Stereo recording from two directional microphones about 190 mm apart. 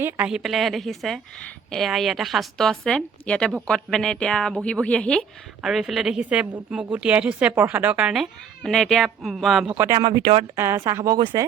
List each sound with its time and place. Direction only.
0.0 s a woman's voice: 5° right (ahead or behind)
10.1 s speech: 25° right (ahead or behind)
10.6 s speech: 15° right (ahead or behind)